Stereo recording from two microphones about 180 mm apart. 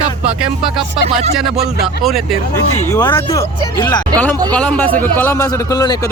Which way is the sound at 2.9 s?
15° left (ahead or behind).